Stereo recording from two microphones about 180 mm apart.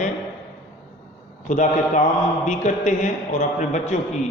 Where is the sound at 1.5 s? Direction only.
45° left (ahead or behind).